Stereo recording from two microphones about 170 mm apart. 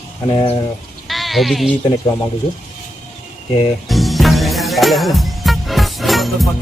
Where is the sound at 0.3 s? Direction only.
30° left (ahead or behind).